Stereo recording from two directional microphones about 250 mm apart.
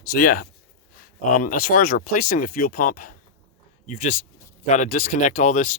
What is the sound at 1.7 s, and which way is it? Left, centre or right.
Speech, left.